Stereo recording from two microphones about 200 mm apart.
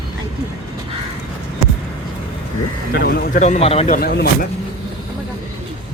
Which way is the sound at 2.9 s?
50° left (ahead or behind).